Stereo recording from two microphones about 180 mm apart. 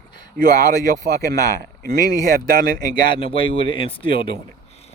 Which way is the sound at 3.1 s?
30° left (ahead or behind).